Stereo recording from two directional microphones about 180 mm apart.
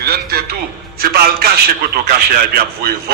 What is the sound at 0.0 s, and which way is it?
A man's voice, 60° right (ahead or behind).